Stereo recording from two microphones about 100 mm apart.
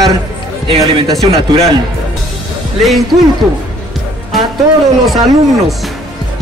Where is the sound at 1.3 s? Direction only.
90° right.